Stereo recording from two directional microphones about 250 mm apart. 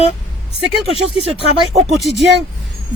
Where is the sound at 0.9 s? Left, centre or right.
Right.